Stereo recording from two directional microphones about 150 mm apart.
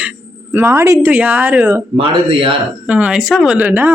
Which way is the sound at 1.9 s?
35° right (ahead or behind).